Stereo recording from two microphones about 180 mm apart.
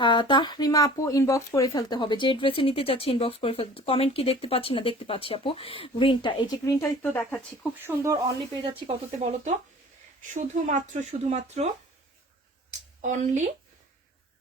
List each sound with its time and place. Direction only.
0.0 s speech: 25° left (ahead or behind); by 7.3 s 10° left (ahead or behind)
7.8 s speech: 15° right (ahead or behind)
9.1 s speech: 40° right (ahead or behind)
13.0 s speech: 40° right (ahead or behind)